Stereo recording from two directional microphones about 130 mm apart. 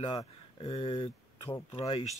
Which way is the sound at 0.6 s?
45° left (ahead or behind).